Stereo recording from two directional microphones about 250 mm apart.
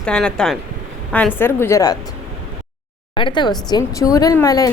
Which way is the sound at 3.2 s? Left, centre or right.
Centre.